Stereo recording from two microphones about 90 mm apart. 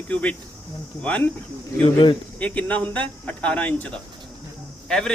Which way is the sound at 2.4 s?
15° left (ahead or behind).